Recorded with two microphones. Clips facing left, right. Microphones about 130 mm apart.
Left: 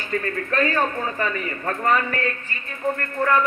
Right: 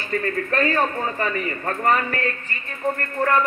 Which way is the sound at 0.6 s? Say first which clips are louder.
Even; 35° right (ahead or behind).